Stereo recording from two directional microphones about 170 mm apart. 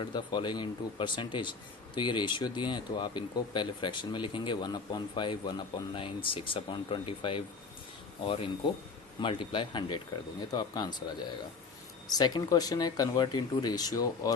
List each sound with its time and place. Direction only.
0.0 s speech: 25° left (ahead or behind)